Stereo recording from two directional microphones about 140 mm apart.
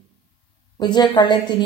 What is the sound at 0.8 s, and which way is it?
Speech, 35° left (ahead or behind).